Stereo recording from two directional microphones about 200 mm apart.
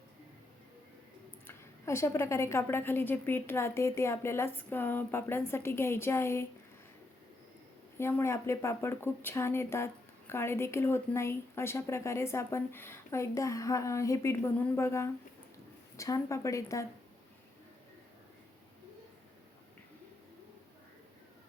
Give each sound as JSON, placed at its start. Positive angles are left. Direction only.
{"t": 1.5, "sound": "speech", "side_deg": 15}
{"t": 7.9, "sound": "speech", "side_deg": 10}